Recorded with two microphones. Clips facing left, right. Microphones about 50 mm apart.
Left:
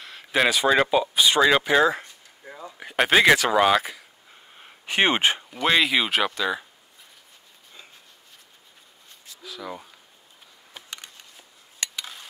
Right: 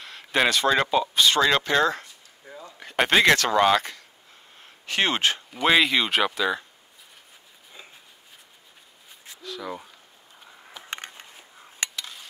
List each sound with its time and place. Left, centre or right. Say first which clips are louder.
0.0 s speech: left 1 dB; centre
4.6 s a sound: left 3 dB; centre
5.5 s speech: right 2 dB; centre
9.4 s speech: right 2 dB; centre
10.9 s a sound: right 7 dB; right
11.9 s stir: left 1 dB; centre